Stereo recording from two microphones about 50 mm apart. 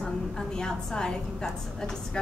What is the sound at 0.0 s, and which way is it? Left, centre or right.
A woman's voice, centre.